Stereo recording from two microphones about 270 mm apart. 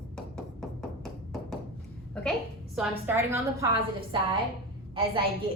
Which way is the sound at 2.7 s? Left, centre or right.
Centre.